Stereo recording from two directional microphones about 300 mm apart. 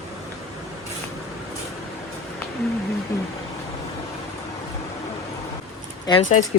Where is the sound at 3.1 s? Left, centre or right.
Centre.